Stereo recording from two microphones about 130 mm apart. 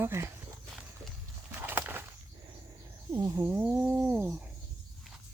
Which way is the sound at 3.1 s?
25° right (ahead or behind).